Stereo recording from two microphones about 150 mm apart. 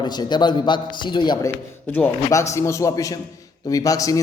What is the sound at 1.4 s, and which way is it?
A man's voice, 15° left (ahead or behind).